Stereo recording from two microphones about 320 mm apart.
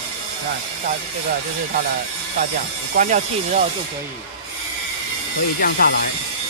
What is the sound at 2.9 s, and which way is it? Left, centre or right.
Speech, right.